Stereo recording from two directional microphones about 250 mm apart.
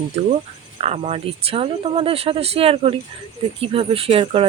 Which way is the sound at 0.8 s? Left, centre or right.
Right.